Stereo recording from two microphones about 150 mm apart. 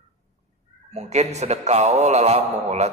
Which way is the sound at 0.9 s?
50° right (ahead or behind).